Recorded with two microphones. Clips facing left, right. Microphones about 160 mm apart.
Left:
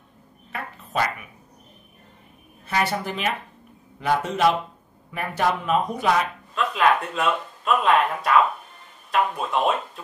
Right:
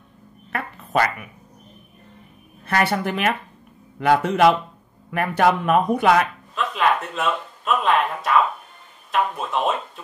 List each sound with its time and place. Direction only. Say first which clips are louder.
2.6 s speech: right 3 dB; 60° right (ahead or behind)
6.5 s speech: left 1 dB; centre (ahead or behind)